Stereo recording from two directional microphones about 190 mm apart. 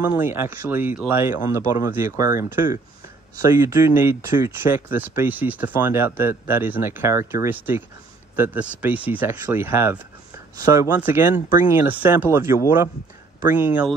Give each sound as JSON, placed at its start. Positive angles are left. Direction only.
{"t": 0.0, "sound": "speech", "side_deg": -10}
{"t": 11.2, "sound": "speech", "side_deg": 45}
{"t": 11.7, "sound": "speech", "side_deg": -10}